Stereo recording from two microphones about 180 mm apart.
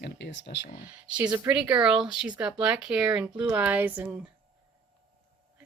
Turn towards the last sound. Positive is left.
turn(degrees=-10)  # may be behind; listen again after turning